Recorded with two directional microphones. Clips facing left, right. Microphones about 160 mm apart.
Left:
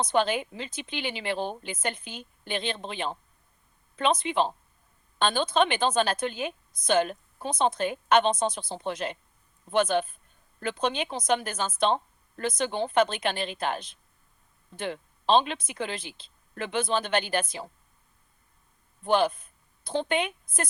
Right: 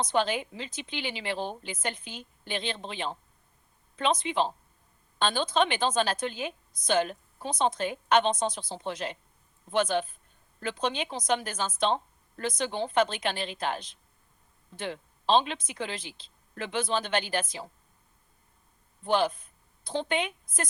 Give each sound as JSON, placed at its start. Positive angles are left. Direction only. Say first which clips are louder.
{"t": 0.0, "sound": "a woman's voice", "louder": "left 2 dB", "side_deg": 55}
{"t": 19.0, "sound": "a woman's voice", "louder": "left 2 dB", "side_deg": 55}